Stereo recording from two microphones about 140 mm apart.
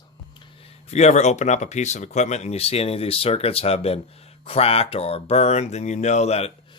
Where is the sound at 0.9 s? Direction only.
55° left (ahead or behind).